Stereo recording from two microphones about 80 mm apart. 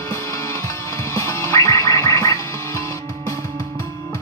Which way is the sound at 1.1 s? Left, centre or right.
Left.